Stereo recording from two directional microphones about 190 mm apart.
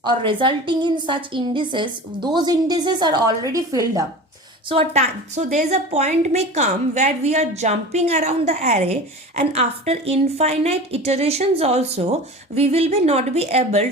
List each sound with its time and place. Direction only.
0.0 s a woman's voice: 25° right (ahead or behind)
4.7 s a woman's voice: 35° right (ahead or behind)